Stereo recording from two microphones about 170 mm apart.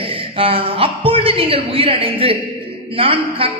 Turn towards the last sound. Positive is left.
turn(degrees=-35)  # may be behind; listen again after turning